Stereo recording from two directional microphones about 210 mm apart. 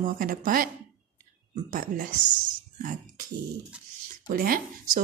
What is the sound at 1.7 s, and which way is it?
Speech, 40° right (ahead or behind).